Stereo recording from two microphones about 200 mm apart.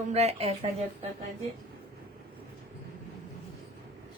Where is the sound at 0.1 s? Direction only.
35° right (ahead or behind).